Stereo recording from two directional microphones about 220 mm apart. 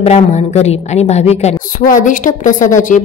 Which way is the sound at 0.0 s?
30° left (ahead or behind).